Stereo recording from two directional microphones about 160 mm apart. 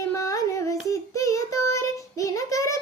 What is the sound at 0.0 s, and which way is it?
Child singing, 20° left (ahead or behind).